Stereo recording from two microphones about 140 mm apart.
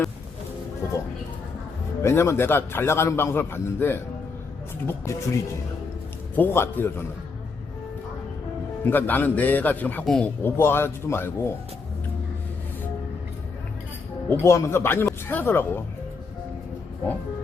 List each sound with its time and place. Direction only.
2.0 s a man's voice: 20° left (ahead or behind)
6.3 s a man's voice: 15° left (ahead or behind)
8.8 s a man's voice: 15° left (ahead or behind)
14.3 s a man's voice: 20° left (ahead or behind)